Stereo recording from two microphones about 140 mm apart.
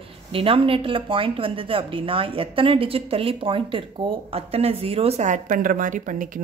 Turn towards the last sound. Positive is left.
turn(degrees=-75)  # may be behind; listen again after turning